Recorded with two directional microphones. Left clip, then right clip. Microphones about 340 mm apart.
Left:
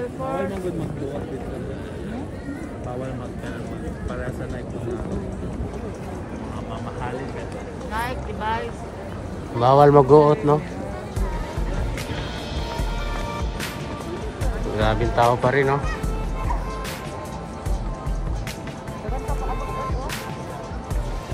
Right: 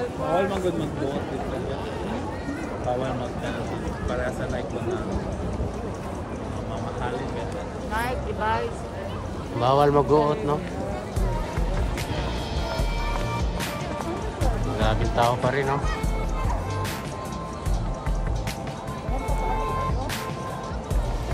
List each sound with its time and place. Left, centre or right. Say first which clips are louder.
7.9 s speech: even; right
9.6 s a man's voice: left 6 dB; centre
14.4 s speech: left 3 dB; centre